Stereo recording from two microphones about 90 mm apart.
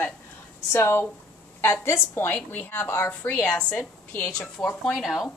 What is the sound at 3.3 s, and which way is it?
Speech, 10° left (ahead or behind).